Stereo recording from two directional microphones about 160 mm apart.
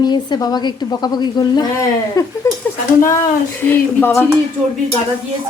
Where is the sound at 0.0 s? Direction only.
25° left (ahead or behind).